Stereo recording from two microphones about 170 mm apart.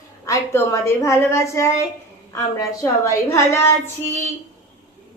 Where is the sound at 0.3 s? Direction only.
20° left (ahead or behind).